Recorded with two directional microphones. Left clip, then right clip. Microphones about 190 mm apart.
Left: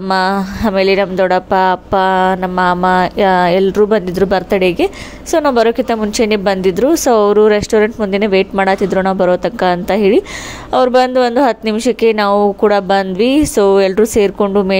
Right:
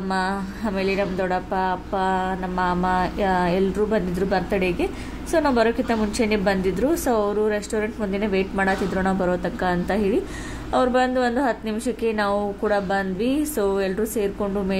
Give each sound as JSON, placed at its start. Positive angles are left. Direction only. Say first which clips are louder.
{"t": 0.1, "sound": "a woman's voice", "louder": "left 12 dB", "side_deg": 40}